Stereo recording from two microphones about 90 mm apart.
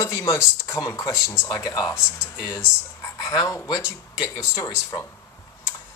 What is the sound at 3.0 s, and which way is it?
Speech, 35° left (ahead or behind).